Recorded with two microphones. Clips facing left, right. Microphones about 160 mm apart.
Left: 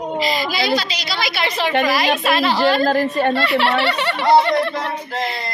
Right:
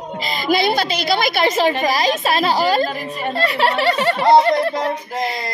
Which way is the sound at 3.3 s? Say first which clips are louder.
Left 1 dB; 40° right (ahead or behind).